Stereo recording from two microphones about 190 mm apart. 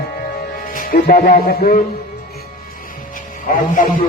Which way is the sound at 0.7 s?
50° left (ahead or behind).